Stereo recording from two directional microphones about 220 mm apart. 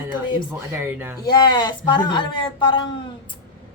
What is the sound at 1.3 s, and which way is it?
A woman's voice, 20° left (ahead or behind).